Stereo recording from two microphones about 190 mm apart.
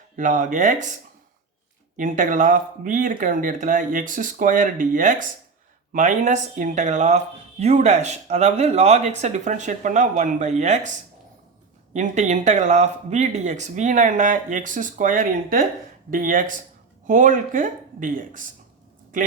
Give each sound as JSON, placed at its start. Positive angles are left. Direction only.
{"t": 0.2, "sound": "speech", "side_deg": -40}
{"t": 2.0, "sound": "speech", "side_deg": -45}
{"t": 11.9, "sound": "speech", "side_deg": -40}